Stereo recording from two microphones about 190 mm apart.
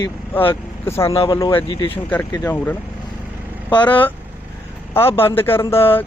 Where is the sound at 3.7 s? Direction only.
25° left (ahead or behind).